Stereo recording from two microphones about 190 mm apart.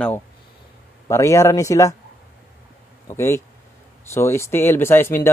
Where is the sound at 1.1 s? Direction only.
15° left (ahead or behind).